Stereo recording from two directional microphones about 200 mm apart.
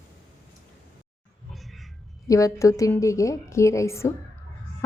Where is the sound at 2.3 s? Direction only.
15° left (ahead or behind).